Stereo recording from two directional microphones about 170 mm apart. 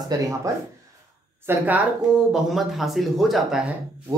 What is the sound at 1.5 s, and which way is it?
Speech, 10° right (ahead or behind).